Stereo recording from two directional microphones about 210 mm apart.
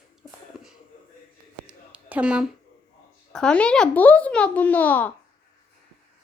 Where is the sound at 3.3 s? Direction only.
5° left (ahead or behind).